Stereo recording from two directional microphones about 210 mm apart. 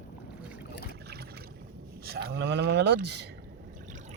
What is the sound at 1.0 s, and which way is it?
Boat, 50° right (ahead or behind).